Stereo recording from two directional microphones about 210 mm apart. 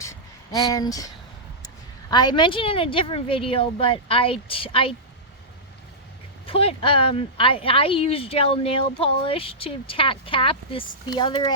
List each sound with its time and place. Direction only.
0.0 s a sound: 15° left (ahead or behind)
1.6 s speech: 20° left (ahead or behind)
6.4 s speech: 25° left (ahead or behind)